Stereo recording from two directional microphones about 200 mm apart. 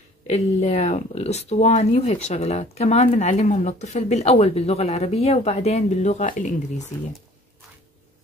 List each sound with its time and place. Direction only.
0.3 s speech: 35° left (ahead or behind)